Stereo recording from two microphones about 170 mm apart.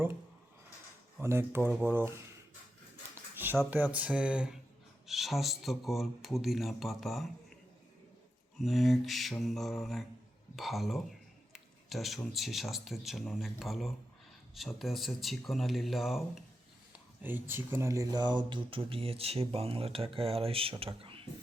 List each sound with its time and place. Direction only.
1.2 s speech: 15° right (ahead or behind)
3.3 s a sound: 10° right (ahead or behind)
3.7 s speech: 10° right (ahead or behind)
8.6 s speech: centre (ahead or behind)
17.2 s speech: 10° right (ahead or behind); by 21.2 s 30° right (ahead or behind)